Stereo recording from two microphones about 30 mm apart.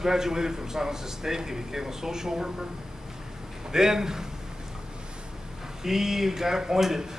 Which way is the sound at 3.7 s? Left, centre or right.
Centre.